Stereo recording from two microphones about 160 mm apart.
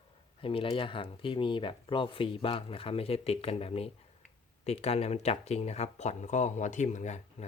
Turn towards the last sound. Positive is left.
turn(degrees=45)  # may be behind; listen again after turning